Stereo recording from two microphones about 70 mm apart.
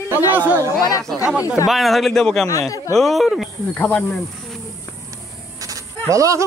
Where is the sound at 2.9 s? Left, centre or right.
Centre.